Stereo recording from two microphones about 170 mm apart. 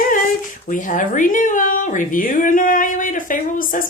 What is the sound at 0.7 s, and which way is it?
A woman's voice, 50° left (ahead or behind).